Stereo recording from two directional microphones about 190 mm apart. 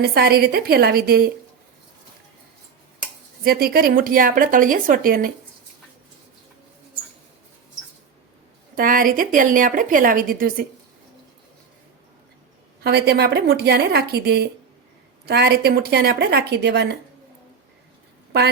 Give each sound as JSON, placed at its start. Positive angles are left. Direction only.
{"t": 0.0, "sound": "a woman's voice", "side_deg": -55}
{"t": 3.4, "sound": "a woman's voice", "side_deg": -55}
{"t": 8.7, "sound": "a woman's voice", "side_deg": -45}
{"t": 12.8, "sound": "a woman's voice", "side_deg": -60}